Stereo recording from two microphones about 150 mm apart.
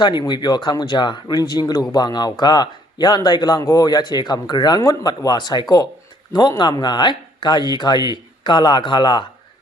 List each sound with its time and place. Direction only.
0.0 s speech: 30° left (ahead or behind)